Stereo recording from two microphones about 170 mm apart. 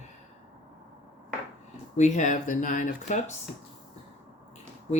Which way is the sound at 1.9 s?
45° left (ahead or behind).